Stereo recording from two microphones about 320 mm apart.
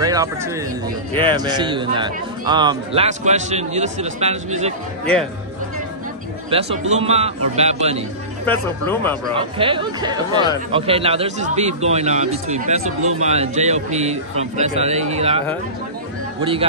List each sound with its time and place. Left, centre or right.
0.0 s speech: centre
6.5 s a man's voice: centre
8.5 s speech: centre
9.4 s a man's voice: centre
12.8 s speech: right
13.2 s a man's voice: right